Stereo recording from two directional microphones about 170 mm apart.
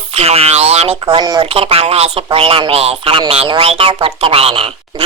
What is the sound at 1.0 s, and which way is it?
Speech, 25° right (ahead or behind).